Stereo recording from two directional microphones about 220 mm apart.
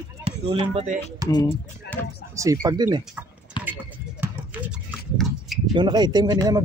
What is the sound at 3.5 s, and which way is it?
Basketball bounce, 20° left (ahead or behind).